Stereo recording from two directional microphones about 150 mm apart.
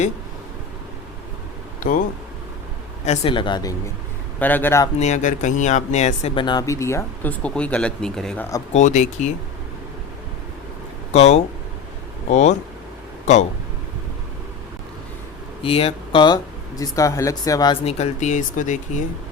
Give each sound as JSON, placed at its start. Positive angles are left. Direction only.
{"t": 1.8, "sound": "speech", "side_deg": 65}
{"t": 3.1, "sound": "speech", "side_deg": 35}
{"t": 4.4, "sound": "speech", "side_deg": 10}
{"t": 4.9, "sound": "speech", "side_deg": 50}
{"t": 6.3, "sound": "speech", "side_deg": 30}
{"t": 8.7, "sound": "speech", "side_deg": 55}
{"t": 11.1, "sound": "speech", "side_deg": 45}
{"t": 15.6, "sound": "speech", "side_deg": 40}
{"t": 17.8, "sound": "speech", "side_deg": 45}